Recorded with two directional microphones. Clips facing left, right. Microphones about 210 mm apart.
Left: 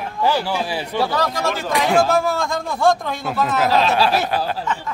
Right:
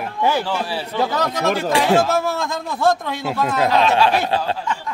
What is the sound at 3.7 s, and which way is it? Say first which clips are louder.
Speech: right 2 dB; 35° left (ahead or behind).